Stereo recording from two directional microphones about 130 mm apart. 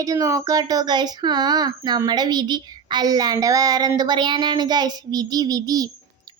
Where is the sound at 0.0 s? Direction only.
25° right (ahead or behind).